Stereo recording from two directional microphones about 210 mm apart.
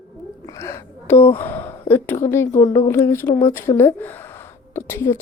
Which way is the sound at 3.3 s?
30° left (ahead or behind).